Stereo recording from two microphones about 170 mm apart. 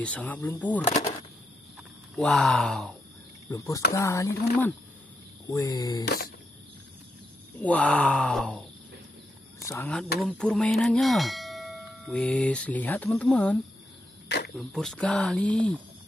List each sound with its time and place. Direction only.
0.0 s speech: 10° left (ahead or behind)
2.1 s speech: 5° left (ahead or behind)
3.4 s a sound: 20° left (ahead or behind)
3.9 s speech: 20° left (ahead or behind)
5.5 s a sound: 20° left (ahead or behind)
6.0 s cricket: 60° left (ahead or behind)
7.6 s speech: 10° left (ahead or behind)
9.6 s a sound: 15° left (ahead or behind)
10.2 s bell: 5° left (ahead or behind)
14.6 s speech: centre (ahead or behind)